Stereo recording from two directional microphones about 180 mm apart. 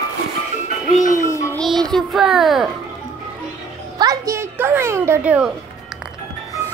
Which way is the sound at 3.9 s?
20° right (ahead or behind).